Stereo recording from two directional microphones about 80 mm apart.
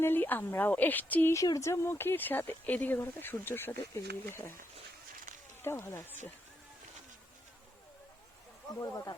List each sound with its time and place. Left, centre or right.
0.0 s speech: left
1.3 s speech: left
5.6 s speech: left
8.8 s speech: left